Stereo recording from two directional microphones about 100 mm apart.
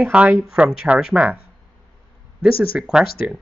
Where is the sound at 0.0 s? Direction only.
10° right (ahead or behind).